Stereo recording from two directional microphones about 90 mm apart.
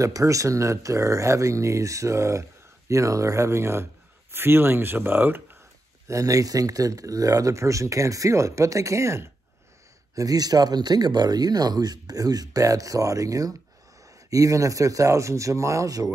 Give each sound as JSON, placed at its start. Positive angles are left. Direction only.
{"t": 0.0, "sound": "speech", "side_deg": -35}
{"t": 6.0, "sound": "speech", "side_deg": -35}
{"t": 10.1, "sound": "speech", "side_deg": -45}